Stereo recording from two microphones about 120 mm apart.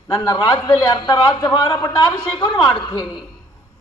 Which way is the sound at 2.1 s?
10° left (ahead or behind).